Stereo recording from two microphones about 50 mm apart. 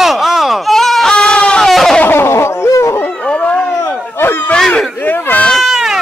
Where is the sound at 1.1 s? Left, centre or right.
Centre.